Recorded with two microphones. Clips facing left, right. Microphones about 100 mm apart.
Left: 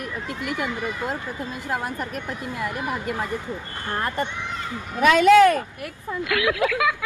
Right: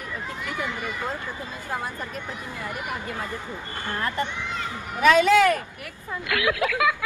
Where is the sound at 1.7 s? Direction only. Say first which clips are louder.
Left 3 dB; 70° left (ahead or behind).